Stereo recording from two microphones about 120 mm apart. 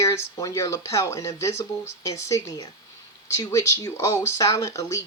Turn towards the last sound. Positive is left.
turn(degrees=25)  # may be behind; listen again after turning